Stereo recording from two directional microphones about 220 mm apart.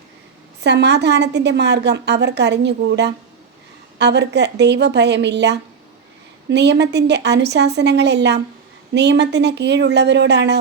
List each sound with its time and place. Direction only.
0.6 s a woman's voice: 50° right (ahead or behind)